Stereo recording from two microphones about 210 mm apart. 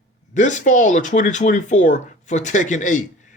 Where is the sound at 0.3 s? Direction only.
35° left (ahead or behind).